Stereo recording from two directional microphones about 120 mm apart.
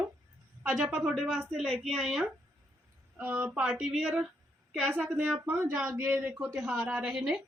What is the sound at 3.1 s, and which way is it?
A woman's voice, 15° right (ahead or behind).